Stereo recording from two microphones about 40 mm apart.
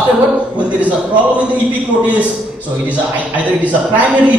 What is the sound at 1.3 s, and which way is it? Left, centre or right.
Speech, right.